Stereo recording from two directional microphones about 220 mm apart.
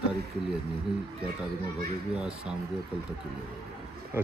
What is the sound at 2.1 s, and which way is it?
Speech, 5° right (ahead or behind).